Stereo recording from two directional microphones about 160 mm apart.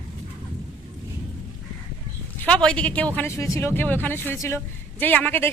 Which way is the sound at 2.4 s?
5° left (ahead or behind).